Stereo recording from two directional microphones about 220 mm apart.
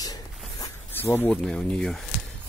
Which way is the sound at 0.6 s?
10° left (ahead or behind).